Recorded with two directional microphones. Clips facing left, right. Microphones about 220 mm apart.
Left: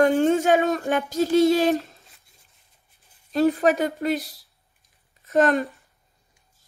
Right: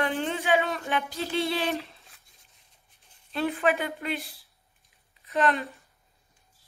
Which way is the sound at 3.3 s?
40° left (ahead or behind).